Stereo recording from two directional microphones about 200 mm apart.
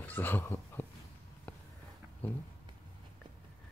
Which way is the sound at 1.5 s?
5° left (ahead or behind).